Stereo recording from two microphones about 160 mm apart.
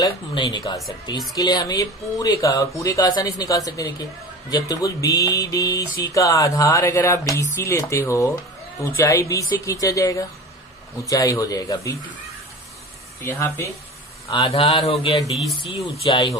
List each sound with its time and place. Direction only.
0.0 s a sound: 30° left (ahead or behind)
13.2 s speech: 15° left (ahead or behind)
14.3 s a man's voice: 35° left (ahead or behind)
15.3 s speech: centre (ahead or behind)
15.6 s a man's voice: 35° left (ahead or behind)